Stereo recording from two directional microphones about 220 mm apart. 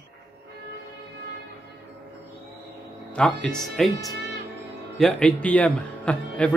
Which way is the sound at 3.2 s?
5° left (ahead or behind).